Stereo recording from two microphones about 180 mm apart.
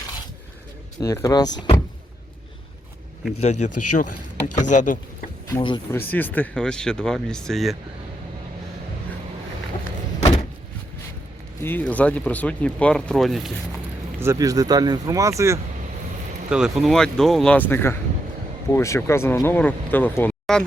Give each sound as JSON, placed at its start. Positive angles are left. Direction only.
{"t": 0.9, "sound": "speech", "side_deg": 20}
{"t": 3.4, "sound": "speech", "side_deg": 40}
{"t": 5.5, "sound": "speech", "side_deg": 25}
{"t": 5.9, "sound": "speech", "side_deg": 10}
{"t": 10.2, "sound": "vehicle", "side_deg": 35}
{"t": 11.6, "sound": "speech", "side_deg": 10}
{"t": 14.2, "sound": "speech", "side_deg": -15}
{"t": 16.5, "sound": "speech", "side_deg": -5}